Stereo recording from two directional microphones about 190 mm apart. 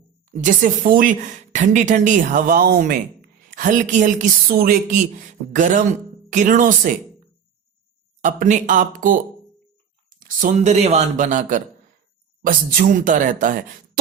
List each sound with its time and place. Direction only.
0.3 s speech: 40° right (ahead or behind)
8.2 s speech: 40° right (ahead or behind)
10.2 s speech: 40° right (ahead or behind)